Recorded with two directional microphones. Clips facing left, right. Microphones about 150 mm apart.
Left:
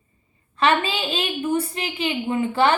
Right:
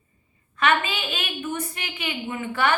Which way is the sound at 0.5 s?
30° left (ahead or behind).